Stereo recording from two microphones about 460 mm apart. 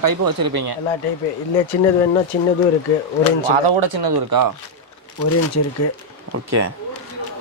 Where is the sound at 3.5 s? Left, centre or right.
Right.